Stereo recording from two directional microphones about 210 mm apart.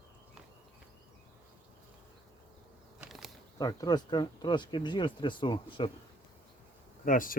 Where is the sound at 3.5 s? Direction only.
15° left (ahead or behind).